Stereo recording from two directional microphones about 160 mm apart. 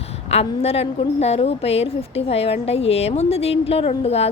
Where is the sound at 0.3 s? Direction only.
40° left (ahead or behind).